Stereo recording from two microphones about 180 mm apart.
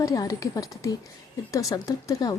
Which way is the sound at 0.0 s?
20° left (ahead or behind).